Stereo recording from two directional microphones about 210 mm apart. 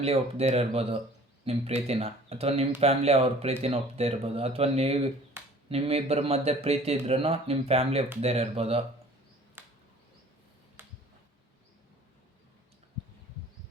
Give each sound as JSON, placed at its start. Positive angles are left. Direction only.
{"t": 0.0, "sound": "speech", "side_deg": -30}
{"t": 9.6, "sound": "a sound", "side_deg": -10}
{"t": 10.8, "sound": "finger snapping", "side_deg": -10}